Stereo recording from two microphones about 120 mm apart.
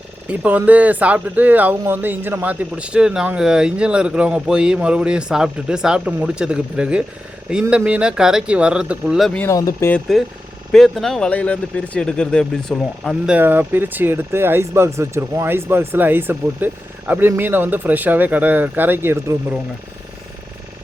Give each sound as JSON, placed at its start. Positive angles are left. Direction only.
{"t": 0.3, "sound": "speech", "side_deg": -15}
{"t": 9.5, "sound": "speech", "side_deg": 25}
{"t": 10.7, "sound": "speech", "side_deg": 5}
{"t": 13.2, "sound": "speech", "side_deg": -15}